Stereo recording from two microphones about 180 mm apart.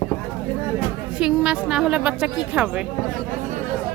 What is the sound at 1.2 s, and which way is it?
A woman's voice, 5° right (ahead or behind).